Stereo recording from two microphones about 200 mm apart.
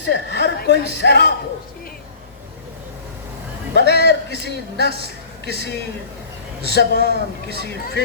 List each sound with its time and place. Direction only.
0.0 s a man's voice: 60° left (ahead or behind)
3.8 s a man's voice: 55° left (ahead or behind)
6.7 s a man's voice: 55° left (ahead or behind)